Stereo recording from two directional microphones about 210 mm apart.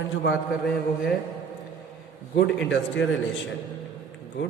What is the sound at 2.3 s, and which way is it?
Speech, 60° left (ahead or behind).